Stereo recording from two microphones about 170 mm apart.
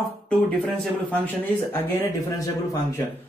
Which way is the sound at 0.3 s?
5° left (ahead or behind).